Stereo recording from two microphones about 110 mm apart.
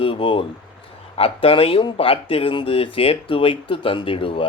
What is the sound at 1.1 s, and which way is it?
Speech, 60° left (ahead or behind).